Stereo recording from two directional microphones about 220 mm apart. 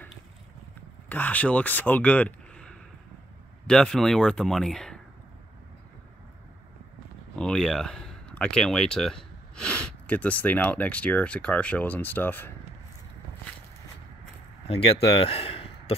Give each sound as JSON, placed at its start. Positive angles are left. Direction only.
{"t": 1.0, "sound": "speech", "side_deg": 5}
{"t": 7.3, "sound": "speech", "side_deg": 5}
{"t": 14.7, "sound": "speech", "side_deg": 25}